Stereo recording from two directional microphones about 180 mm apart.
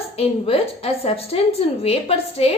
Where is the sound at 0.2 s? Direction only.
30° left (ahead or behind).